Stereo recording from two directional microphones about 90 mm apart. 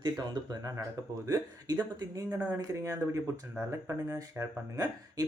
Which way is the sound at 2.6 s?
40° right (ahead or behind).